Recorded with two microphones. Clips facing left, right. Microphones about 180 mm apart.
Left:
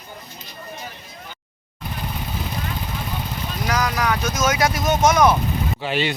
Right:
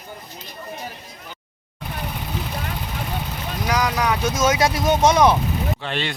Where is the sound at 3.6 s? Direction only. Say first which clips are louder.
Right 1 dB; 15° right (ahead or behind).